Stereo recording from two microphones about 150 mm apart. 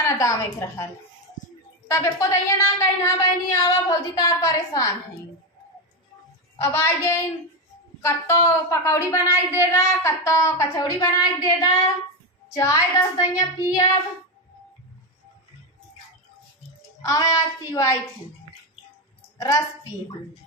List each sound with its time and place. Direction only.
0.0 s a woman's voice: 20° left (ahead or behind)
1.9 s a woman's voice: 20° left (ahead or behind)
6.6 s a woman's voice: 15° left (ahead or behind)
17.0 s a woman's voice: 25° left (ahead or behind)
19.4 s a woman's voice: 25° left (ahead or behind)